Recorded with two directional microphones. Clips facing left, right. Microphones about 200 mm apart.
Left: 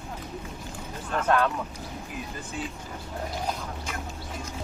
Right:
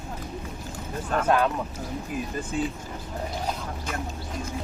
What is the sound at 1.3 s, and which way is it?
Speech, 10° right (ahead or behind).